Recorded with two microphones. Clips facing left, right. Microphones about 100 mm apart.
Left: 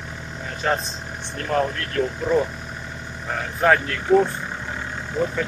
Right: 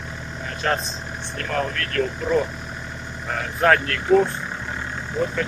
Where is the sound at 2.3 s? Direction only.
Centre (ahead or behind).